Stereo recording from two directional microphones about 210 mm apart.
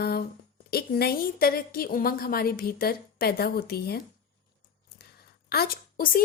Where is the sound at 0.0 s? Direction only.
45° left (ahead or behind).